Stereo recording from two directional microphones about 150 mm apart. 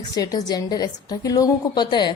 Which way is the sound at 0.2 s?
25° left (ahead or behind).